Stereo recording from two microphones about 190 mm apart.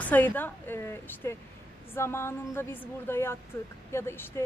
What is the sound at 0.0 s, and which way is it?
Speech, 10° left (ahead or behind).